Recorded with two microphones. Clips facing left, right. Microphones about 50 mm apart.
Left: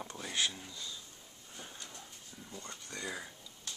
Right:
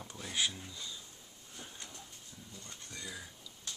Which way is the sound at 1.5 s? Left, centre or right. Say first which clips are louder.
Left 1 dB; centre.